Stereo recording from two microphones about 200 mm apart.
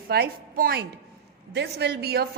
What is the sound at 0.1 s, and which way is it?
A woman's voice, 50° right (ahead or behind).